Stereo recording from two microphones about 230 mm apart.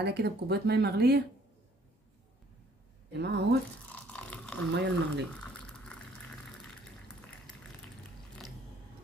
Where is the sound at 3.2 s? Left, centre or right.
Right.